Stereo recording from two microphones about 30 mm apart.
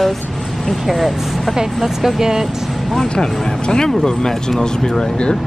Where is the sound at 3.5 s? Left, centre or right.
Left.